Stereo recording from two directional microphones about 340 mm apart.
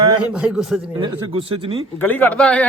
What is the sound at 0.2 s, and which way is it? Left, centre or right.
Speech, centre.